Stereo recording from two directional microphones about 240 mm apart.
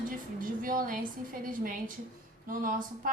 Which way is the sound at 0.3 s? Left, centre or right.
Right.